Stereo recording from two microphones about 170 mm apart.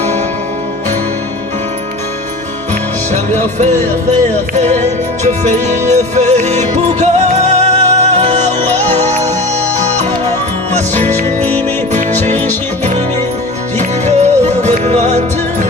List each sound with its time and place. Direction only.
3.6 s music: 45° right (ahead or behind)
11.3 s music: 10° left (ahead or behind)
13.7 s music: 40° right (ahead or behind)